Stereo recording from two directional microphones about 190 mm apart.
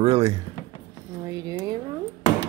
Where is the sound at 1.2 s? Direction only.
20° right (ahead or behind).